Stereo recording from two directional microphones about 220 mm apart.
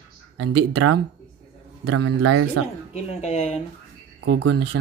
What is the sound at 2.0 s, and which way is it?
Speech, 75° right (ahead or behind).